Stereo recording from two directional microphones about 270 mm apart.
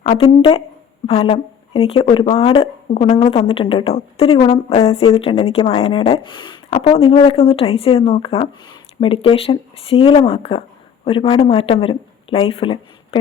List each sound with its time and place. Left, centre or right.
0.0 s speech: left